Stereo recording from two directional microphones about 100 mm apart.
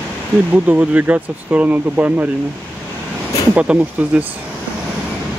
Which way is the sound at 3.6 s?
15° right (ahead or behind).